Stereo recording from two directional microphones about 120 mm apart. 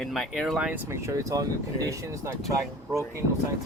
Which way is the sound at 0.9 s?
25° right (ahead or behind).